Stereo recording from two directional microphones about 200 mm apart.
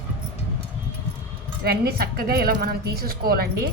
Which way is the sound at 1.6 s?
50° right (ahead or behind).